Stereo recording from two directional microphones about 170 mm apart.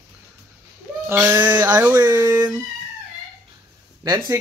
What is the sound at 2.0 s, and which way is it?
Speech, 25° right (ahead or behind).